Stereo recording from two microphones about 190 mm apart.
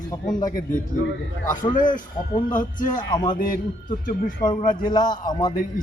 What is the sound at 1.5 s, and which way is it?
A man's voice, 45° left (ahead or behind).